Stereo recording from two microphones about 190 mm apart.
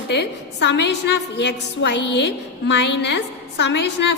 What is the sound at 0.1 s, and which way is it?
A woman's voice, 65° left (ahead or behind).